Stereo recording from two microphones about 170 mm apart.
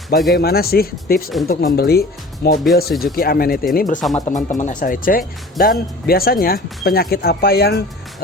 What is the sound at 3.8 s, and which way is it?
Speech, 50° left (ahead or behind).